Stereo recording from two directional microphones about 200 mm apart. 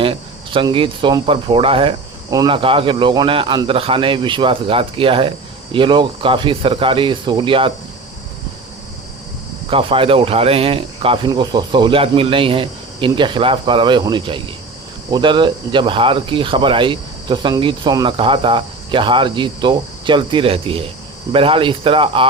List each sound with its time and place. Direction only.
0.0 s speech: 25° right (ahead or behind)
9.6 s speech: 25° right (ahead or behind)